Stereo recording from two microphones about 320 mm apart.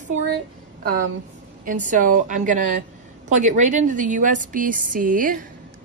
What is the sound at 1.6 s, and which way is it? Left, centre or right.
A woman's voice, right.